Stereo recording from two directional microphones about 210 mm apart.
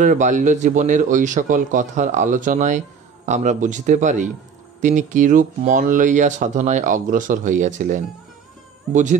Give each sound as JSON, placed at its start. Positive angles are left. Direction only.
{"t": 0.0, "sound": "speech", "side_deg": -35}